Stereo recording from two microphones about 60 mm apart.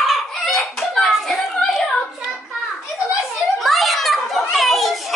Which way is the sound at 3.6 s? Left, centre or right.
Centre.